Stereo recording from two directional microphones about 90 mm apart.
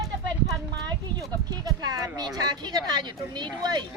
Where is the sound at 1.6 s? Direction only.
45° right (ahead or behind).